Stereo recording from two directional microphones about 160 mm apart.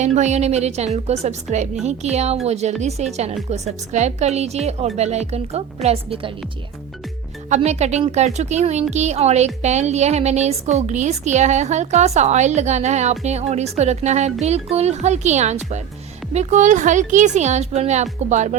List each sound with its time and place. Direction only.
0.0 s speech: 45° right (ahead or behind)
7.5 s speech: 45° right (ahead or behind)